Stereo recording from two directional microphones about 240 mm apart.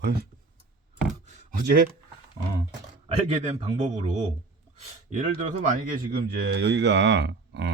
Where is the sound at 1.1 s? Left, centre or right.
Right.